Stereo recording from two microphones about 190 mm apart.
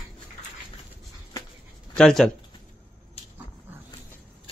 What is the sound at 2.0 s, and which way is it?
Speech, 5° left (ahead or behind).